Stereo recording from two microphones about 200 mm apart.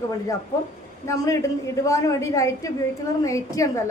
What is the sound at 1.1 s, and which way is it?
A woman's voice, 15° left (ahead or behind).